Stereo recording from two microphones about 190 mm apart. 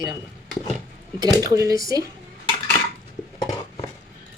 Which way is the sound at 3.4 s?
20° left (ahead or behind).